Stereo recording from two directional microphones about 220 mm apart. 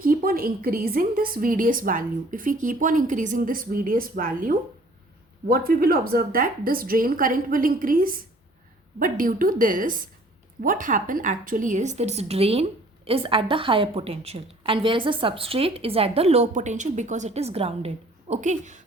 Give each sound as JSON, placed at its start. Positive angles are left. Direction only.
{"t": 0.0, "sound": "a woman's voice", "side_deg": -40}